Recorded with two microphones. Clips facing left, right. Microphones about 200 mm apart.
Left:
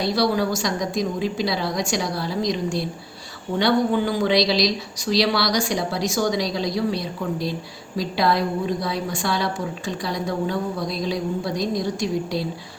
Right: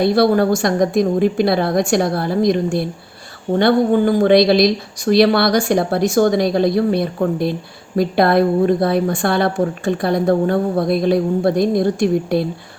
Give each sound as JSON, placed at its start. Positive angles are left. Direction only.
{"t": 0.0, "sound": "a woman's voice", "side_deg": -55}